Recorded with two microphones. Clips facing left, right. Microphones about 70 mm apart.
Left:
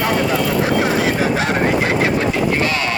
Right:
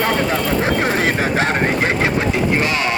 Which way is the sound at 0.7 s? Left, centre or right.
Right.